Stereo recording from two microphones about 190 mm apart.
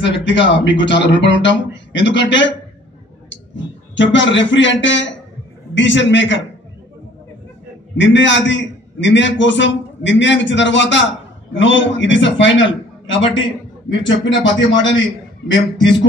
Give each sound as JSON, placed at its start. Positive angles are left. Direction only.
{"t": 0.0, "sound": "a man's voice", "side_deg": 70}
{"t": 8.0, "sound": "a man's voice", "side_deg": 75}
{"t": 13.0, "sound": "a man's voice", "side_deg": 90}
{"t": 13.8, "sound": "a man's voice", "side_deg": 75}